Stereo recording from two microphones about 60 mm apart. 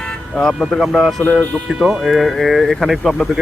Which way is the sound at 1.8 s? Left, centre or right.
Centre.